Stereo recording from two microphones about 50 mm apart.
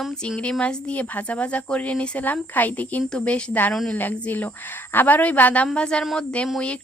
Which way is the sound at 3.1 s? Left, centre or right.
Left.